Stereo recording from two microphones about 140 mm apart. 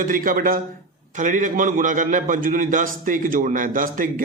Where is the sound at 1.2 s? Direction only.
65° right (ahead or behind).